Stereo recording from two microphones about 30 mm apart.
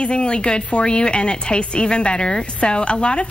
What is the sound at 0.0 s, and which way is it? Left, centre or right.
A woman's voice, left.